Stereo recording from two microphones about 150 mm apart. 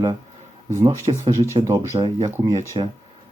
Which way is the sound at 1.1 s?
35° right (ahead or behind).